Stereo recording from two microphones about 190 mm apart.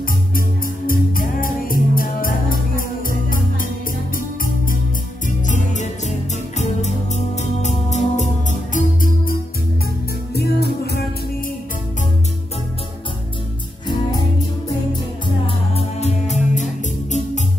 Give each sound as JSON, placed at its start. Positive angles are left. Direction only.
{"t": 0.8, "sound": "music", "side_deg": 50}
{"t": 5.5, "sound": "music", "side_deg": 40}
{"t": 10.3, "sound": "music", "side_deg": 60}
{"t": 15.4, "sound": "music", "side_deg": 30}